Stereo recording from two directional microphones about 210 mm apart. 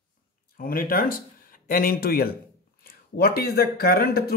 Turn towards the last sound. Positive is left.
turn(degrees=45)  # may be behind; listen again after turning